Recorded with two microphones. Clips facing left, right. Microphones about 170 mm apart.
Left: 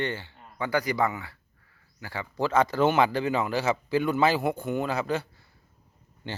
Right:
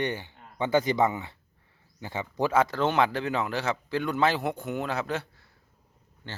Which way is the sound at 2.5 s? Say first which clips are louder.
Left 3 dB; 5° right (ahead or behind).